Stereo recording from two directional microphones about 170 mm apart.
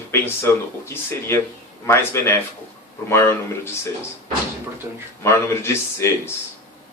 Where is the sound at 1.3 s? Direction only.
15° left (ahead or behind).